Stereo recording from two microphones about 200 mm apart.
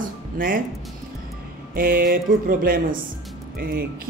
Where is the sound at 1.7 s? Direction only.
45° right (ahead or behind).